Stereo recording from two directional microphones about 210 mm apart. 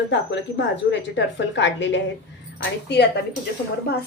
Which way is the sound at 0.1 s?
60° left (ahead or behind).